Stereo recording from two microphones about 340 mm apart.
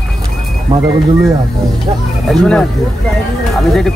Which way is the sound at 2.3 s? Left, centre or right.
Centre.